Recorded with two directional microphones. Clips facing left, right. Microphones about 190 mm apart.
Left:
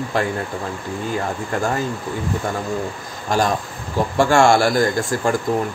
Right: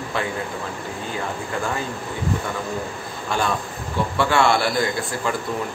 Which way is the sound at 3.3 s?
40° left (ahead or behind).